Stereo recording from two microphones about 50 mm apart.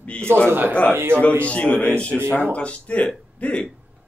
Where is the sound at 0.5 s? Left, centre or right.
Right.